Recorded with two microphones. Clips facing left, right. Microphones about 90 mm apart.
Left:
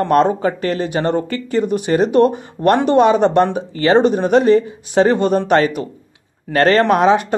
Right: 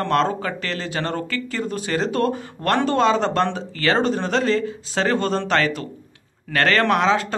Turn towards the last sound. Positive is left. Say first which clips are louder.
# left 6 dB
turn(degrees=20)  # may be behind; listen again after turning